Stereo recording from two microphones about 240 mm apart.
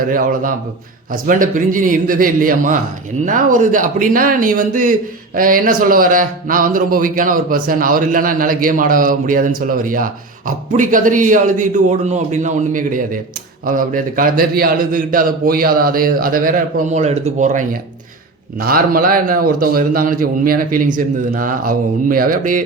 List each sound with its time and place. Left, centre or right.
0.0 s speech: right